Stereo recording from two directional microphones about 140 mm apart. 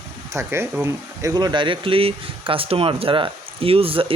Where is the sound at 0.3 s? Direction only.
20° right (ahead or behind).